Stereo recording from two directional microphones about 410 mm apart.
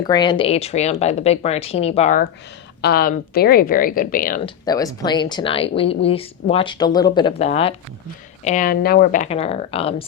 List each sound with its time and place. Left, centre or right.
0.0 s speech: centre
4.6 s speech: centre